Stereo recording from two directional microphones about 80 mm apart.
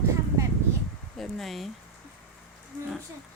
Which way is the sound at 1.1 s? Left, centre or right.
Centre.